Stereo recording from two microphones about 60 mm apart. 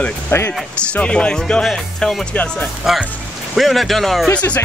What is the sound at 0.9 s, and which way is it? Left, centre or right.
Speech, centre.